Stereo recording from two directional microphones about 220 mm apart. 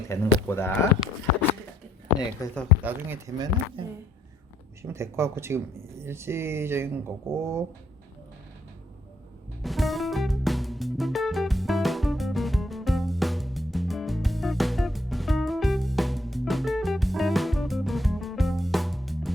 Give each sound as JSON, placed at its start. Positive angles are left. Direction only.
{"t": 0.1, "sound": "speech", "side_deg": 10}
{"t": 2.4, "sound": "speech", "side_deg": 15}
{"t": 2.8, "sound": "speech", "side_deg": -10}
{"t": 9.6, "sound": "music", "side_deg": 0}